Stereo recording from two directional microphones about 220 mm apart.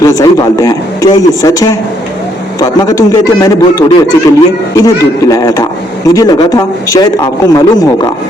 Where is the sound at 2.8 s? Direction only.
15° left (ahead or behind).